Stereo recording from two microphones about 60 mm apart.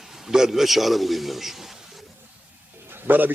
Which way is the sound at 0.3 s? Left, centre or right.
Centre.